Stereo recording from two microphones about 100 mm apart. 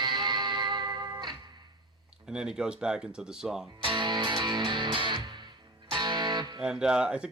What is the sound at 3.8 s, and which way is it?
Music, 50° right (ahead or behind).